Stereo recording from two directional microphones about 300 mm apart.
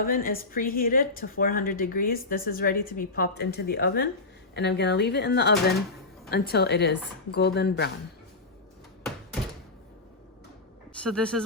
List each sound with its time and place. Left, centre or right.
0.0 s a woman's voice: left
11.0 s speech: centre